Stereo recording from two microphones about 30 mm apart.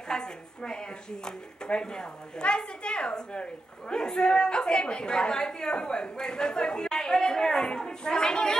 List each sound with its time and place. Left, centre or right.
0.1 s a sound: left
1.7 s a woman's voice: left
4.1 s a woman's voice: left